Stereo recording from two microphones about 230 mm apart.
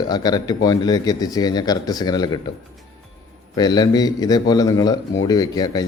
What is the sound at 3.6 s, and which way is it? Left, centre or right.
Speech, centre.